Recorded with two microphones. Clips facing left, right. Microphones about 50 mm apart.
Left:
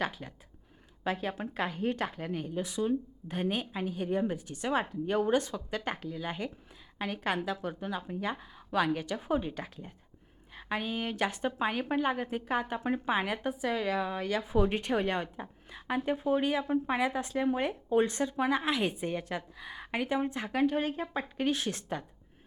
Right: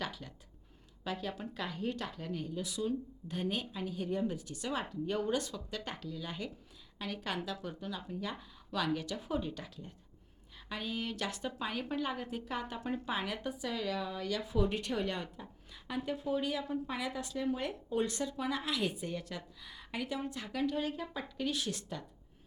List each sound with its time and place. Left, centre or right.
0.0 s speech: left